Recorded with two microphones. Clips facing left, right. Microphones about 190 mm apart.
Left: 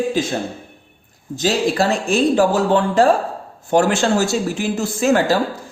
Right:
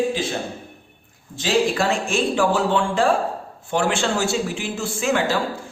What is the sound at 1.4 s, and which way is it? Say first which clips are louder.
Speech: left 2 dB; 40° left (ahead or behind).